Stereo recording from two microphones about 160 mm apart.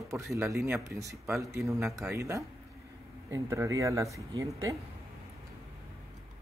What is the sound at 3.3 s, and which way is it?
Speech, 20° right (ahead or behind).